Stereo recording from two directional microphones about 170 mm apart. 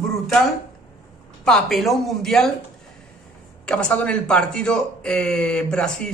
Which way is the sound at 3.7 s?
5° left (ahead or behind).